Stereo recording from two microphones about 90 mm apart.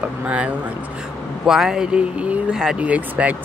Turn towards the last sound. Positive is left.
turn(degrees=-15)  # may be behind; listen again after turning